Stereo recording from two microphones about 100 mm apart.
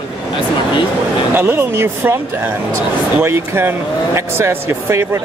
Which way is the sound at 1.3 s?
20° right (ahead or behind).